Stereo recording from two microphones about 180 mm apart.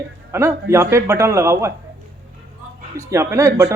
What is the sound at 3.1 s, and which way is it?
Speech, 15° right (ahead or behind).